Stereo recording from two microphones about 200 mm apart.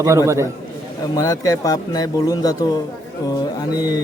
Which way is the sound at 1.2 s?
15° left (ahead or behind).